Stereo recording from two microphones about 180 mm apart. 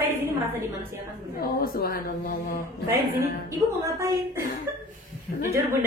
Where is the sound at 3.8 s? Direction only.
15° right (ahead or behind).